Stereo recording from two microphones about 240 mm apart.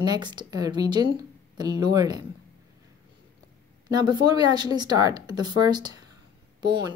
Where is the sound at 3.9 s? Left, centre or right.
Centre.